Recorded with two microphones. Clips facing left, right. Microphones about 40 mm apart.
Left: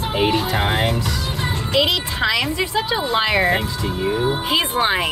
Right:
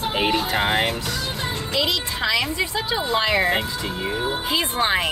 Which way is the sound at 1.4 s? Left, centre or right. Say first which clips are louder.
Left 6 dB; left.